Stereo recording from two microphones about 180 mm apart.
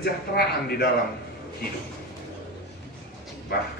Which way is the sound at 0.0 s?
60° left (ahead or behind).